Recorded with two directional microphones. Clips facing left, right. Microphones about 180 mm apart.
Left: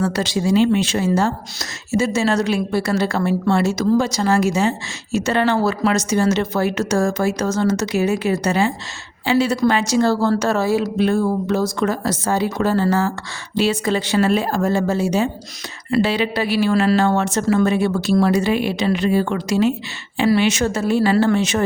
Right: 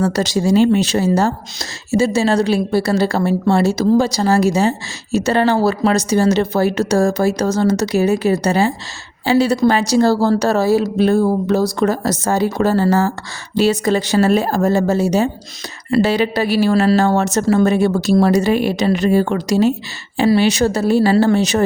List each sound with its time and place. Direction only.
0.0 s a woman's voice: 40° right (ahead or behind)